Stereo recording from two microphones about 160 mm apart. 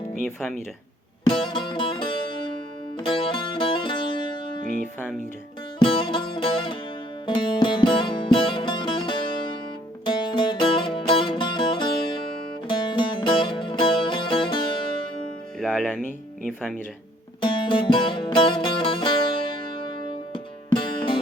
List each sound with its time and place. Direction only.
1.5 s music: 30° left (ahead or behind)
4.6 s speech: 50° right (ahead or behind)
5.8 s music: 30° left (ahead or behind)
15.6 s music: centre (ahead or behind)
16.0 s speech: 60° left (ahead or behind)
16.5 s speech: 5° right (ahead or behind)
17.4 s music: 30° left (ahead or behind)
20.3 s music: 30° left (ahead or behind)